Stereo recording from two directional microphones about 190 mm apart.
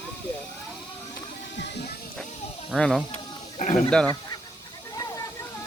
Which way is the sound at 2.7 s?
Centre (ahead or behind).